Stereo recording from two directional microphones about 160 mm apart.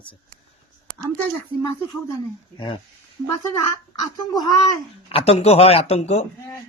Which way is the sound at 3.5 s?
25° left (ahead or behind).